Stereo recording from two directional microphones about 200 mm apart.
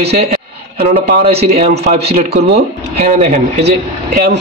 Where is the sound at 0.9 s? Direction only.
30° right (ahead or behind).